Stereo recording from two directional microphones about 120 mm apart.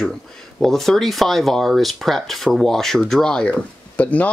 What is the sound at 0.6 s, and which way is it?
Speech, centre (ahead or behind).